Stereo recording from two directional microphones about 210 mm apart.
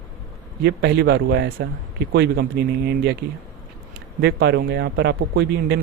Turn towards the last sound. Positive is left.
turn(degrees=-50)  # may be behind; listen again after turning